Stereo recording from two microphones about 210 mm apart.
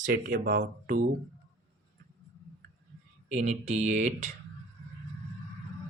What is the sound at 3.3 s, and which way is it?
Speech, 35° right (ahead or behind).